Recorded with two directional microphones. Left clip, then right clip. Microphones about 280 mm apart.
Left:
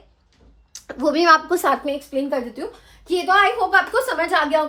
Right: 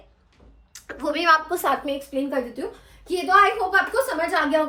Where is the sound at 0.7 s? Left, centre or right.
Centre.